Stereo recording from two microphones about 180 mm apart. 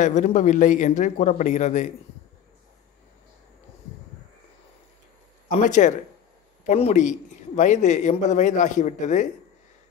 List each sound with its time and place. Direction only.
0.0 s a man's voice: 45° left (ahead or behind)
5.6 s a man's voice: 45° left (ahead or behind)